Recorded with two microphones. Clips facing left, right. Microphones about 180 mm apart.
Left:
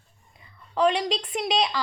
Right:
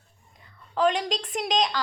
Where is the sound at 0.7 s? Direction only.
Centre (ahead or behind).